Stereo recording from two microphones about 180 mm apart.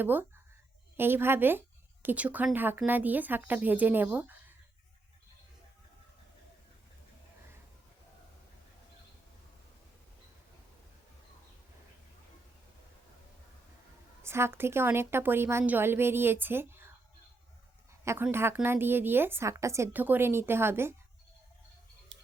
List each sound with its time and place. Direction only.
0.0 s speech: 10° right (ahead or behind)
14.2 s speech: 15° right (ahead or behind)
18.0 s speech: 15° right (ahead or behind)
22.1 s tick-tock: 90° right